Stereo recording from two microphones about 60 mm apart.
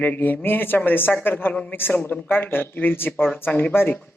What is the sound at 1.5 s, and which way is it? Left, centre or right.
Speech, centre.